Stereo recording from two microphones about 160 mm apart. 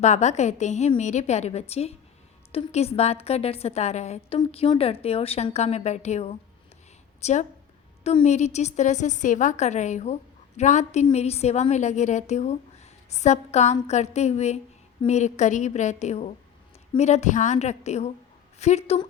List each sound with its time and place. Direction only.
0.0 s a woman's voice: 45° left (ahead or behind)